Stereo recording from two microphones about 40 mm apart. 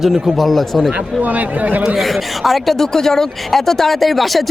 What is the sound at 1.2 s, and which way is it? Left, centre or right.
Speech, right.